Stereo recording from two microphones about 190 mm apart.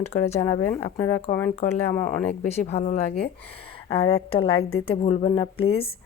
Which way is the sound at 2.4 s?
35° left (ahead or behind).